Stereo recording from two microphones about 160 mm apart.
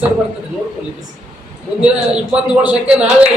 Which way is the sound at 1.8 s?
5° right (ahead or behind).